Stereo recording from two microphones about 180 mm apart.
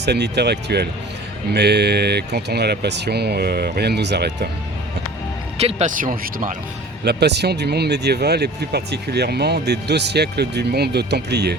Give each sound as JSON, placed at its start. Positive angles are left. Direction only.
{"t": 0.0, "sound": "speech", "side_deg": -70}
{"t": 5.5, "sound": "speech", "side_deg": -35}
{"t": 6.0, "sound": "speech", "side_deg": -50}
{"t": 7.0, "sound": "speech", "side_deg": -65}